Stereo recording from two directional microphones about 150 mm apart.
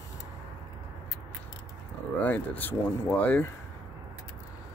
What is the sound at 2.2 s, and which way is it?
Speech, 10° left (ahead or behind).